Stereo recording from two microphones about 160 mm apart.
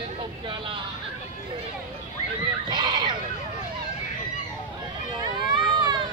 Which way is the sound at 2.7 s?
30° right (ahead or behind).